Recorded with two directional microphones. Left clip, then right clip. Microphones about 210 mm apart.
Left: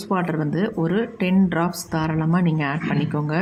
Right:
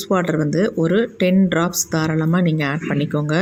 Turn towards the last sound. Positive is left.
turn(degrees=-15)  # may be behind; listen again after turning